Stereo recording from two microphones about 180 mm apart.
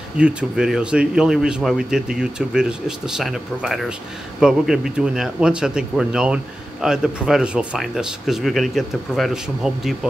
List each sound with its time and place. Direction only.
0.2 s speech: 5° right (ahead or behind)